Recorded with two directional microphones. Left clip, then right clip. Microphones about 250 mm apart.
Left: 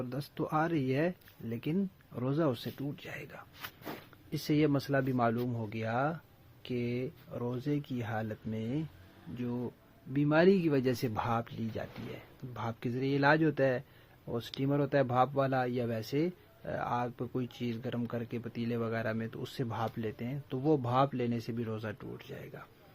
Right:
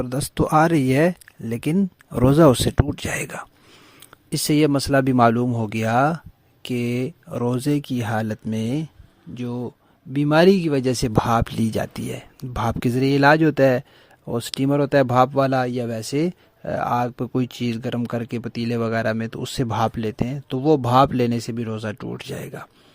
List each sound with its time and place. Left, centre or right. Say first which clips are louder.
0.0 s speech: right 14 dB; right